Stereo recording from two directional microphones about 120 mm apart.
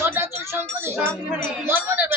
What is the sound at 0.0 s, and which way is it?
A woman's voice, 20° right (ahead or behind).